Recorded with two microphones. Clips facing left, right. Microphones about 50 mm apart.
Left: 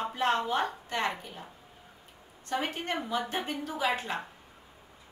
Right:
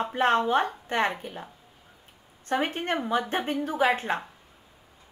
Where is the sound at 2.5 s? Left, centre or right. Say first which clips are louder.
Right 5 dB; right.